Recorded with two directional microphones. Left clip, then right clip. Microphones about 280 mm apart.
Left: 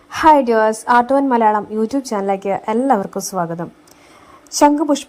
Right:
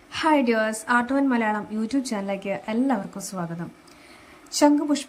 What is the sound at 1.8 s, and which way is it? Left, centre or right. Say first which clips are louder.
Speech: left 8 dB; centre.